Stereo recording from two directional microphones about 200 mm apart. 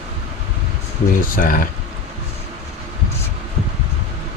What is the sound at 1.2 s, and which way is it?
Speech, 45° left (ahead or behind).